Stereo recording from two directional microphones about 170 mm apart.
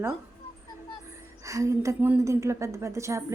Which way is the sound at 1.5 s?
20° right (ahead or behind).